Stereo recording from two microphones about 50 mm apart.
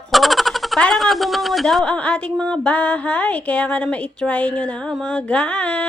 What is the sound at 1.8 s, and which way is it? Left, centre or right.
Speech, left.